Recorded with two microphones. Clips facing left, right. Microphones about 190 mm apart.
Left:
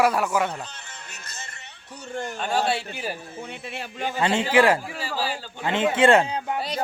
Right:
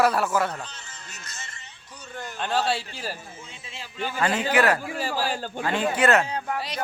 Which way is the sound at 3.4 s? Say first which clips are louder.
Left 8 dB; 65° left (ahead or behind).